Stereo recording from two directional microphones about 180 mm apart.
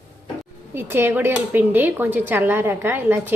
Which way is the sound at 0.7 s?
10° right (ahead or behind).